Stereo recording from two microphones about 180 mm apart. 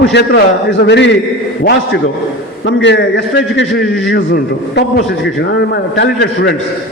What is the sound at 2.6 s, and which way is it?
A man's voice, 80° left.